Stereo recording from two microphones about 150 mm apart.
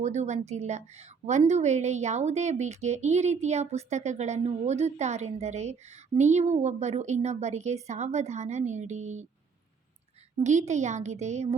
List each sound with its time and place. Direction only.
0.0 s a woman's voice: 50° right (ahead or behind)
10.3 s a woman's voice: 50° right (ahead or behind)